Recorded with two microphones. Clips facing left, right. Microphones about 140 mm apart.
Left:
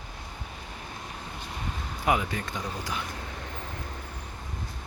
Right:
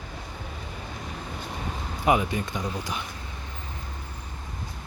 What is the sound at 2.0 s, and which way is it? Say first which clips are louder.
Speech: right 4 dB; 20° right (ahead or behind).